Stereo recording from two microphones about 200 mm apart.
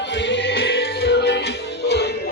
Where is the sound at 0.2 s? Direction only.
65° left (ahead or behind).